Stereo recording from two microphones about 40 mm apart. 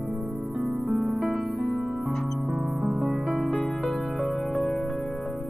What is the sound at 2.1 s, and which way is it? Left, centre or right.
Music, centre.